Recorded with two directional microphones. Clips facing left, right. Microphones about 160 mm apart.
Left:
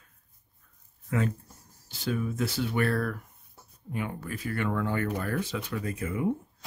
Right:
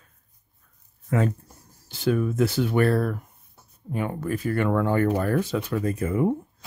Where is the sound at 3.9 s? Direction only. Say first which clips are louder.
Right 7 dB; 45° right (ahead or behind).